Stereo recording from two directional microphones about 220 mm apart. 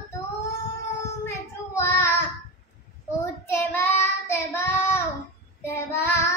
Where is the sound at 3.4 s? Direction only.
10° left (ahead or behind).